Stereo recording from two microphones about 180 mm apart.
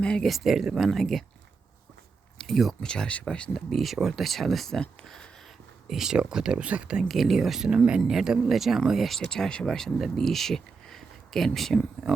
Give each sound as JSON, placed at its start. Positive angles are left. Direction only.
{"t": 0.0, "sound": "speech", "side_deg": 5}
{"t": 2.4, "sound": "speech", "side_deg": 0}